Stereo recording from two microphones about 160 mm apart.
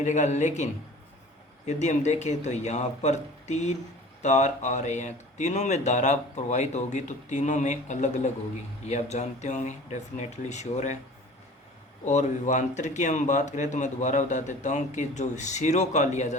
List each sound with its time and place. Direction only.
0.0 s speech: 45° left (ahead or behind)
12.0 s speech: 50° left (ahead or behind)